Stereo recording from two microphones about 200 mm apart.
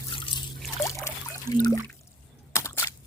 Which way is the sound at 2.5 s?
15° left (ahead or behind).